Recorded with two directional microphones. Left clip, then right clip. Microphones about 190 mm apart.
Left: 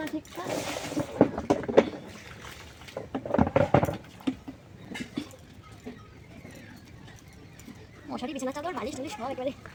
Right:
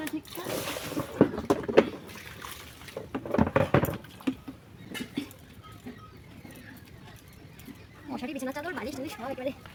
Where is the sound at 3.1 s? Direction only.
25° right (ahead or behind).